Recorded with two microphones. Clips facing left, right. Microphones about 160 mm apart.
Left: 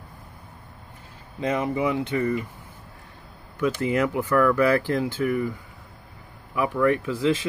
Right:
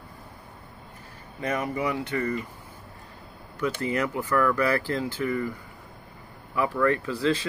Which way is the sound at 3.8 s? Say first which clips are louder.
Left 5 dB; 20° left (ahead or behind).